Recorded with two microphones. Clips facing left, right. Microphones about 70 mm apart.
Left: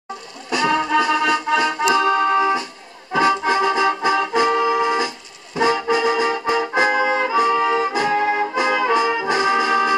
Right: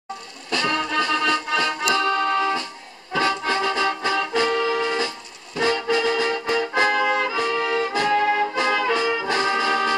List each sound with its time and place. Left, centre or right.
0.5 s accordion: centre
5.6 s music: centre